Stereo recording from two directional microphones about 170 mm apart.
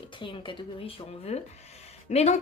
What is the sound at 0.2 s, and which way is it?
Speech, 30° left (ahead or behind).